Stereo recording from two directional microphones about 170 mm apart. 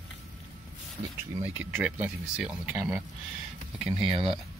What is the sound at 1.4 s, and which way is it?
Speech, 10° right (ahead or behind).